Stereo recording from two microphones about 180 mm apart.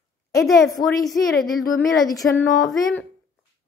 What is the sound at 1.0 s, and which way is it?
Speech, centre (ahead or behind).